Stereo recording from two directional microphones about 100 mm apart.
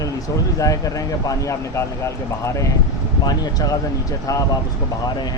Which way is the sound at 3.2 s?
40° left (ahead or behind).